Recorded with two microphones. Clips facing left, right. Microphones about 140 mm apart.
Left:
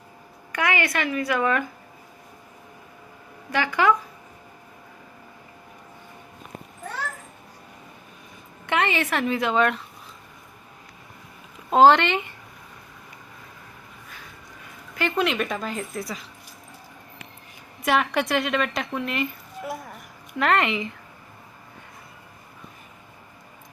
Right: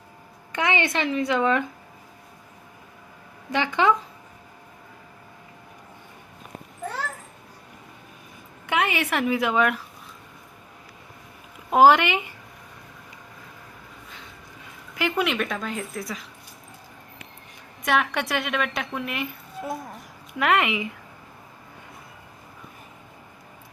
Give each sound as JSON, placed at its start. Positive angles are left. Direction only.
{"t": 0.5, "sound": "a woman's voice", "side_deg": -20}
{"t": 3.5, "sound": "a woman's voice", "side_deg": -20}
{"t": 8.6, "sound": "a woman's voice", "side_deg": -10}
{"t": 11.7, "sound": "a woman's voice", "side_deg": -10}
{"t": 14.9, "sound": "a woman's voice", "side_deg": -10}
{"t": 17.8, "sound": "a woman's voice", "side_deg": 0}
{"t": 20.4, "sound": "a woman's voice", "side_deg": -5}